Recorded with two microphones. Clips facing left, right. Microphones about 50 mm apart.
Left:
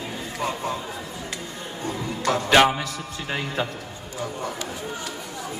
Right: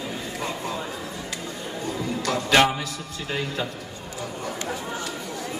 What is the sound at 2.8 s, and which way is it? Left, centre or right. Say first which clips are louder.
Speech: left 1 dB; left.